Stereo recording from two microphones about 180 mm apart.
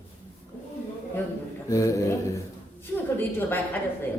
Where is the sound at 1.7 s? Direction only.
15° left (ahead or behind).